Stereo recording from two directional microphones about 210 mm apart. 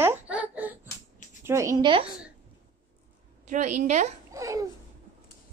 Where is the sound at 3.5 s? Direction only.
35° right (ahead or behind).